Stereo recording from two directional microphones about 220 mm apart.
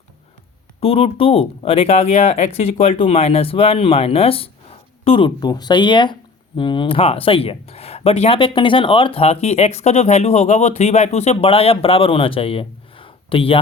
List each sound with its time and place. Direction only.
0.8 s speech: 25° left (ahead or behind)